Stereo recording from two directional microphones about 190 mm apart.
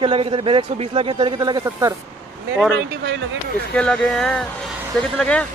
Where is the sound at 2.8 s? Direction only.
65° right (ahead or behind).